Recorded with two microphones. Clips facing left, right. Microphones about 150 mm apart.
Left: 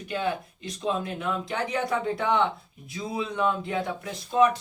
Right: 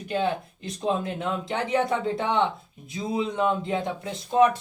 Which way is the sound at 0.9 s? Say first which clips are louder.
Right 2 dB; 25° right (ahead or behind).